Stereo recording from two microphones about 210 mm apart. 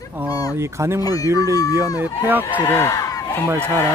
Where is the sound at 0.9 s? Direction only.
15° left (ahead or behind).